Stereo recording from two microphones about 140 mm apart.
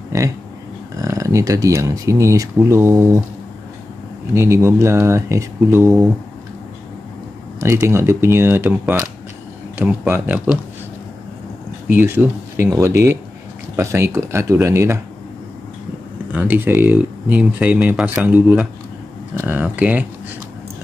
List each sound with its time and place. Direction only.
0.9 s speech: 25° right (ahead or behind)
4.3 s speech: 20° right (ahead or behind)
7.6 s speech: 20° right (ahead or behind)
11.9 s speech: 15° right (ahead or behind)
16.3 s speech: 10° right (ahead or behind)